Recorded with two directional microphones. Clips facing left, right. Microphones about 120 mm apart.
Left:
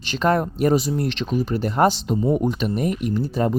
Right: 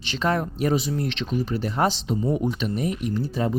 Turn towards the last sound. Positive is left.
turn(degrees=40)  # may be behind; listen again after turning